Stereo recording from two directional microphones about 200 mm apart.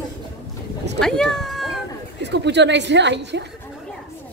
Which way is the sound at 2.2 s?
60° right (ahead or behind).